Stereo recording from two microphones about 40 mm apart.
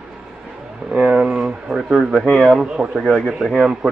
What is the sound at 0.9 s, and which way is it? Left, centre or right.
Speech, right.